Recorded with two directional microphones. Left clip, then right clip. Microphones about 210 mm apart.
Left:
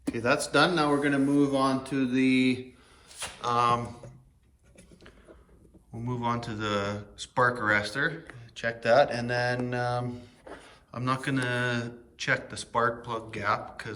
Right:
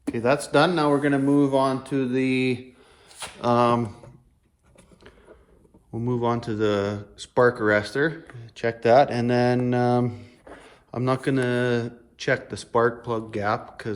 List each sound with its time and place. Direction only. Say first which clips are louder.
0.1 s speech: right 4 dB; 45° right (ahead or behind)
3.2 s speech: right 5 dB; 25° right (ahead or behind)
6.0 s speech: right 6 dB; 20° right (ahead or behind)
10.4 s a sound: right 1 dB; centre (ahead or behind)
10.9 s speech: right 6 dB; 20° right (ahead or behind)